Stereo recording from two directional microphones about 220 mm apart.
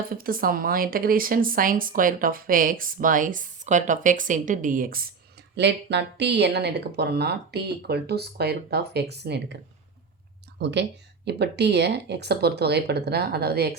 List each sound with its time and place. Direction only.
0.0 s speech: 40° right (ahead or behind)
5.5 s a woman's voice: 50° right (ahead or behind)
10.6 s a woman's voice: 55° right (ahead or behind)